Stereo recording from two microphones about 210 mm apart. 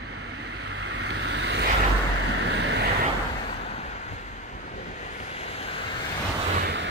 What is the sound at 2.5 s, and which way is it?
Vehicle, 55° right (ahead or behind).